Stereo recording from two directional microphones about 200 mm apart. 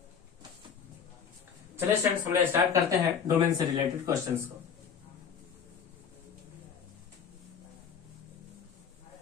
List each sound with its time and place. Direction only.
1.8 s speech: 15° right (ahead or behind)